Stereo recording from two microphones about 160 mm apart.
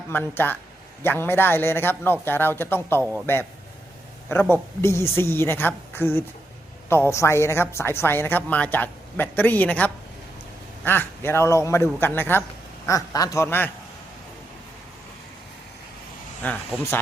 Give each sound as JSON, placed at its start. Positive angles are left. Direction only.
{"t": 0.1, "sound": "speech", "side_deg": 10}
{"t": 3.0, "sound": "a man's voice", "side_deg": -10}
{"t": 4.3, "sound": "speech", "side_deg": 15}
{"t": 16.4, "sound": "speech", "side_deg": 10}